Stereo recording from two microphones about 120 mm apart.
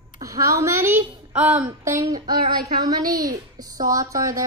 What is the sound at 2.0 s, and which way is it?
A woman's voice, 35° right (ahead or behind).